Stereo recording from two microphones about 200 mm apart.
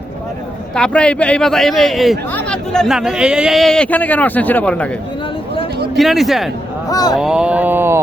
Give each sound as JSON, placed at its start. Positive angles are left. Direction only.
{"t": 0.8, "sound": "a man's voice", "side_deg": 5}
{"t": 6.0, "sound": "a man's voice", "side_deg": 0}
{"t": 6.9, "sound": "speech", "side_deg": 20}
{"t": 7.2, "sound": "speech", "side_deg": -5}